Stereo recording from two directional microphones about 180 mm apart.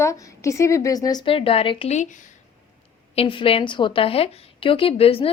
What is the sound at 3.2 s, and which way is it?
A woman's voice, 30° left (ahead or behind).